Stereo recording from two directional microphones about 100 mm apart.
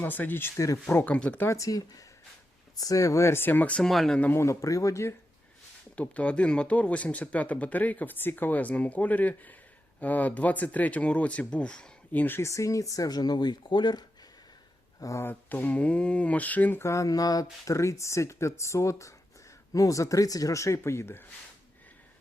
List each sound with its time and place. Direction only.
0.0 s speech: 20° left (ahead or behind)
1.0 s speech: 10° left (ahead or behind)
1.5 s speech: 35° left (ahead or behind); by 3.8 s 15° left (ahead or behind)
3.8 s speech: 5° left (ahead or behind)
4.2 s speech: 20° left (ahead or behind)
4.4 s speech: 35° left (ahead or behind)
6.0 s speech: 15° left (ahead or behind); by 14.0 s 50° left (ahead or behind)
15.0 s speech: 30° left (ahead or behind)
15.3 s speech: 20° left (ahead or behind)